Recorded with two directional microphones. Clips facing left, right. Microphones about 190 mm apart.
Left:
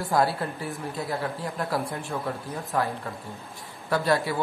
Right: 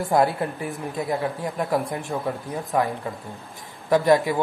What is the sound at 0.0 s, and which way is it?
Speech, 20° right (ahead or behind).